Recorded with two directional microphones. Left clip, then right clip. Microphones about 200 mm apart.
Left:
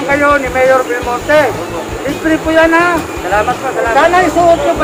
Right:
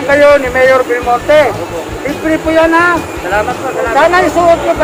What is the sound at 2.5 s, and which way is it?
Speech, 15° right (ahead or behind).